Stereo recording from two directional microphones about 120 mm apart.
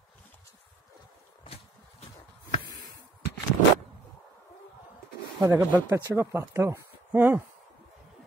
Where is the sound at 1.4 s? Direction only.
55° left (ahead or behind).